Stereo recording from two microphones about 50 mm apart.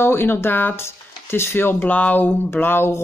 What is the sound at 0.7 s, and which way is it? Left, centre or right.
Speech, left.